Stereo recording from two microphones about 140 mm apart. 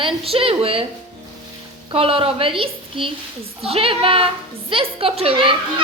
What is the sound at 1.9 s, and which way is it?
A woman's voice, 40° right (ahead or behind).